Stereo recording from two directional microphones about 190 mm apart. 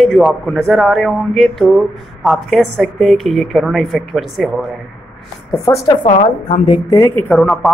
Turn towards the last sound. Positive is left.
turn(degrees=5)  # may be behind; listen again after turning